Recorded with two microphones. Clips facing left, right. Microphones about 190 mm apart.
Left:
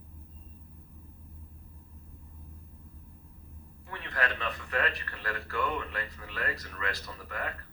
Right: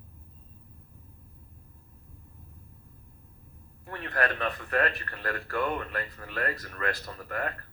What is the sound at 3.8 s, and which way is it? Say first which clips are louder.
A man's voice: right 4 dB; 50° right (ahead or behind).